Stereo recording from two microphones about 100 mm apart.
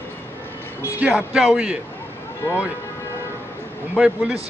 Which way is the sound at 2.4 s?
25° left (ahead or behind).